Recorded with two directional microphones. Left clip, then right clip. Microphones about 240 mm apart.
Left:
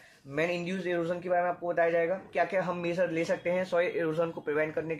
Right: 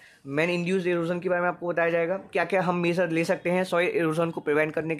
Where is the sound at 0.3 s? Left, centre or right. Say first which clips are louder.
Right 5 dB; right.